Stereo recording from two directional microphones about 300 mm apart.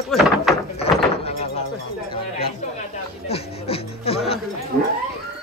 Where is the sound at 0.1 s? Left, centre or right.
Centre.